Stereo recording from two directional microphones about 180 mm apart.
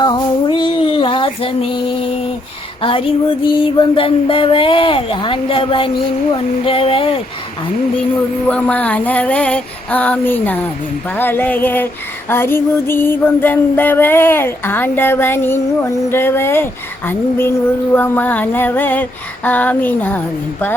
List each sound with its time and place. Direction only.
0.0 s child singing: 25° left (ahead or behind)
2.8 s speech: 30° left (ahead or behind)
8.1 s music: 5° left (ahead or behind)